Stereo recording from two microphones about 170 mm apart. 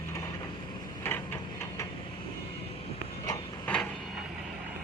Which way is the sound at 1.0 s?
15° left (ahead or behind).